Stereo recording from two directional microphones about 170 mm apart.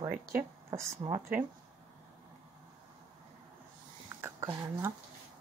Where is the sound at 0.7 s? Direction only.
25° right (ahead or behind).